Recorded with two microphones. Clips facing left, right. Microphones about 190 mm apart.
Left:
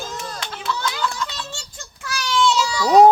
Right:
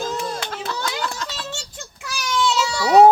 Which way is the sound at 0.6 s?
45° right (ahead or behind).